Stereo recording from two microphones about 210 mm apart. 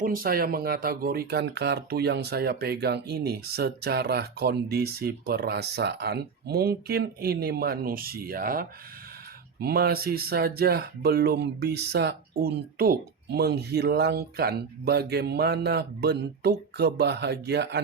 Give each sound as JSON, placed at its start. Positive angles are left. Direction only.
{"t": 0.0, "sound": "speech", "side_deg": -45}